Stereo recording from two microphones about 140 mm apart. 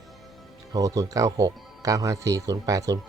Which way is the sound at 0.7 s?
25° right (ahead or behind).